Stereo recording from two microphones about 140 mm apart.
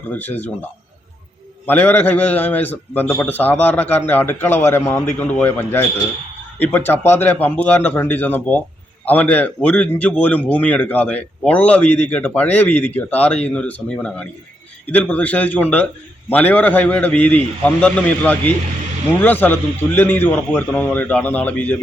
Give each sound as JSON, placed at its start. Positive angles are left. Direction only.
{"t": 0.3, "sound": "a man's voice", "side_deg": 15}